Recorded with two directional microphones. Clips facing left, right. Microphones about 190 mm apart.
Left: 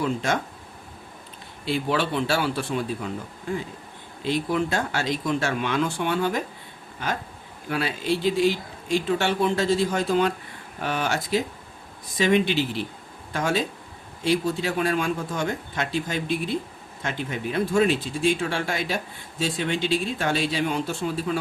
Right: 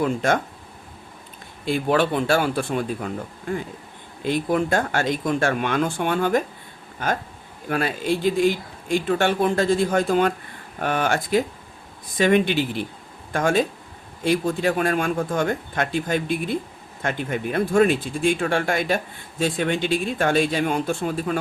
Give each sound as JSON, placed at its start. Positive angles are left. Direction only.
{"t": 0.0, "sound": "speech", "side_deg": -55}
{"t": 1.6, "sound": "speech", "side_deg": -50}